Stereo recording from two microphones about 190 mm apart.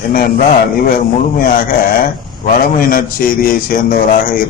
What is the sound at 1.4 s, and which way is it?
A man's voice, 50° left (ahead or behind).